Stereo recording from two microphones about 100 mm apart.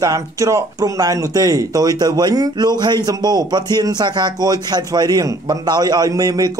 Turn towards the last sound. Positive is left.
turn(degrees=-40)  # may be behind; listen again after turning